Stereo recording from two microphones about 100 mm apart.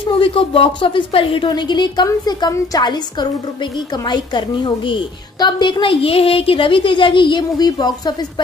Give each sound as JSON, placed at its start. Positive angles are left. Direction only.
{"t": 0.0, "sound": "a woman's voice", "side_deg": 60}
{"t": 1.5, "sound": "a woman's voice", "side_deg": 50}